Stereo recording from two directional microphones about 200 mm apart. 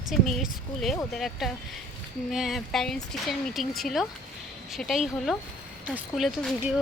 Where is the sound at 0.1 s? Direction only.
Centre (ahead or behind).